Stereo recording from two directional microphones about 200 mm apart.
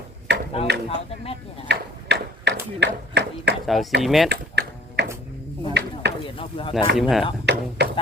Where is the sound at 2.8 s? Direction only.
55° right (ahead or behind).